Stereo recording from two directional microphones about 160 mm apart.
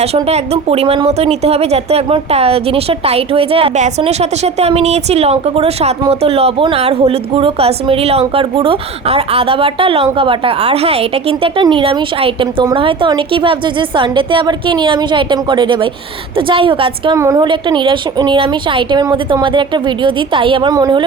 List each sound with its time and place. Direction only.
0.0 s speech: 40° right (ahead or behind)
17.2 s speech: 20° right (ahead or behind)